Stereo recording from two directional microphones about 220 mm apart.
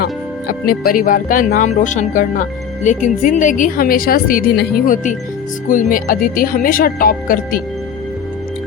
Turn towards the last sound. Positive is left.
turn(degrees=40)  # may be behind; listen again after turning